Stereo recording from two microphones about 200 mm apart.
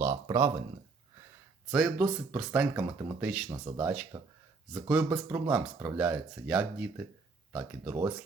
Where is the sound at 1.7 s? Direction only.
5° right (ahead or behind).